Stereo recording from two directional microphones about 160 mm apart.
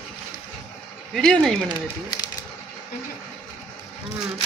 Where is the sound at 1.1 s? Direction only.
Centre (ahead or behind).